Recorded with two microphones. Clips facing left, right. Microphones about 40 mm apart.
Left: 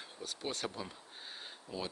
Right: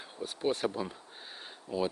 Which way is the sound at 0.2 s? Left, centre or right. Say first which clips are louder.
Right 9 dB; centre.